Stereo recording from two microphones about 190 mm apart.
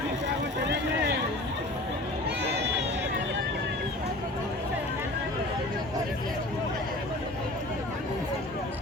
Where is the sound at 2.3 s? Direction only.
65° right (ahead or behind).